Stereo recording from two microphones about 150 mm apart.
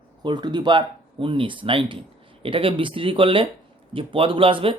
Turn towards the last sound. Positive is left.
turn(degrees=-35)  # may be behind; listen again after turning